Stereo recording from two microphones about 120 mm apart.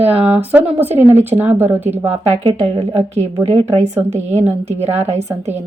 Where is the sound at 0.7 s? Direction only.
15° right (ahead or behind).